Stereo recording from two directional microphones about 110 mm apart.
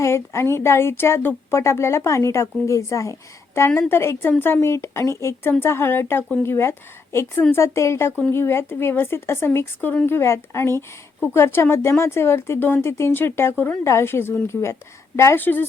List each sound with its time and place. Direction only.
0.0 s speech: 25° left (ahead or behind)